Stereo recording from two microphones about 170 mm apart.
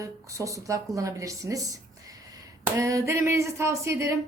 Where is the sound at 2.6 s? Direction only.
20° right (ahead or behind).